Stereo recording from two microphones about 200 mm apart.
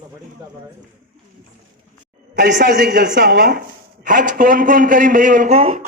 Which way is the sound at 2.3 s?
55° right (ahead or behind).